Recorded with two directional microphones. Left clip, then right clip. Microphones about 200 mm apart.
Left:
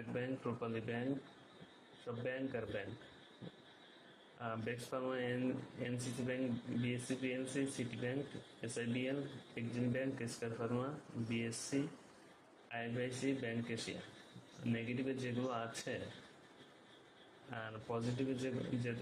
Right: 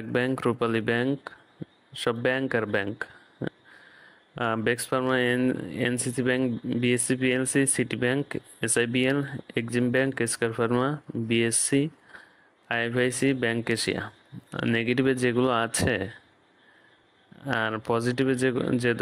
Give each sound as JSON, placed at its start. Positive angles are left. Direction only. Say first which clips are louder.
{"t": 0.1, "sound": "speech", "louder": "right 17 dB", "side_deg": -55}
{"t": 2.2, "sound": "speech", "louder": "right 14 dB", "side_deg": -55}
{"t": 4.4, "sound": "speech", "louder": "right 18 dB", "side_deg": -55}
{"t": 17.5, "sound": "speech", "louder": "right 19 dB", "side_deg": -55}